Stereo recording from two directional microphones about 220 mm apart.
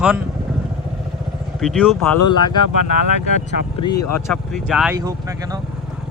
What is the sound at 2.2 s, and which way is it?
Speech, 20° left (ahead or behind).